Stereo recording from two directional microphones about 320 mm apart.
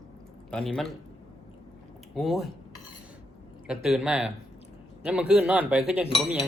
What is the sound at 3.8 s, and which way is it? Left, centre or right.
Speech, centre.